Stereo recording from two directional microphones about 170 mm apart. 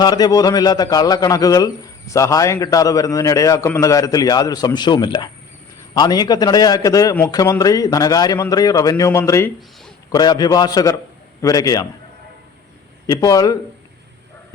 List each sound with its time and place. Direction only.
0.0 s a man's voice: 25° left (ahead or behind)
13.1 s a man's voice: 20° left (ahead or behind)